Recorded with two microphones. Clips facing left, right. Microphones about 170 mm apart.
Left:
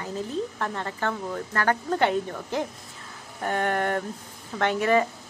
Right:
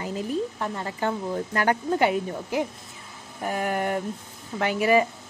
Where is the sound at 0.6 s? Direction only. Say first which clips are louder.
Right 1 dB; 10° right (ahead or behind).